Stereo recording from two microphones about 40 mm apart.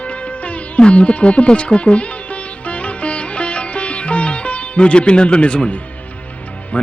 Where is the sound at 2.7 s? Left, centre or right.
Left.